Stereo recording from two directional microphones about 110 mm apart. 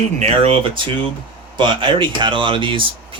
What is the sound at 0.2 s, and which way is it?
Speech, 60° right (ahead or behind).